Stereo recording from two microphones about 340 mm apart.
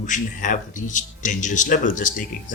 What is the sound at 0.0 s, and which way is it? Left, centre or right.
Speech, left.